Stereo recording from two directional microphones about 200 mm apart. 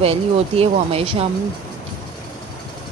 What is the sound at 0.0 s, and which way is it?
Speech, 30° right (ahead or behind).